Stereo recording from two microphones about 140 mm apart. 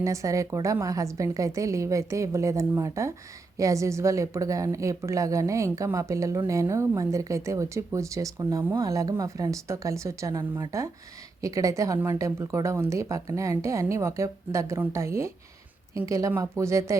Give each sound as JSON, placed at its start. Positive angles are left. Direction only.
{"t": 0.0, "sound": "a woman's voice", "side_deg": -20}